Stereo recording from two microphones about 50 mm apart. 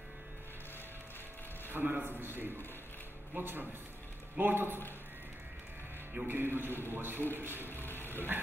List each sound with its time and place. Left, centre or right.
1.7 s a man's voice: right
6.2 s a man's voice: right
7.6 s vehicle: left